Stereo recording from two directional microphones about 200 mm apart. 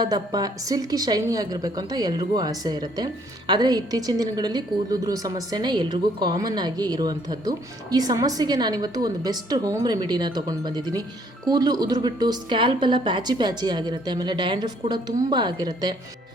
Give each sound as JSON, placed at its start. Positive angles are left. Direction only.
{"t": 0.0, "sound": "a woman's voice", "side_deg": -20}